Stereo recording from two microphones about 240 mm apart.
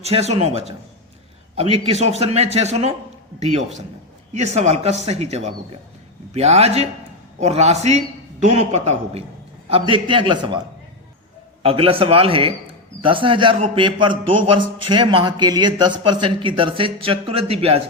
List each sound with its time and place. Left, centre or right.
0.0 s a man's voice: right
11.6 s a man's voice: right